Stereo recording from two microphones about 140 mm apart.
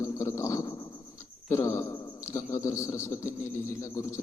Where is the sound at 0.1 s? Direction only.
20° left (ahead or behind).